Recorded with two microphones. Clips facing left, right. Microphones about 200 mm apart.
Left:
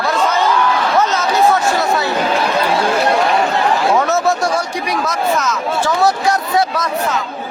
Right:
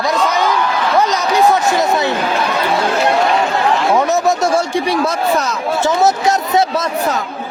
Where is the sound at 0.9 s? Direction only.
15° right (ahead or behind).